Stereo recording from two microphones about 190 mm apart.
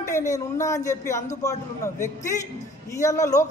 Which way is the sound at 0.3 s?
15° left (ahead or behind).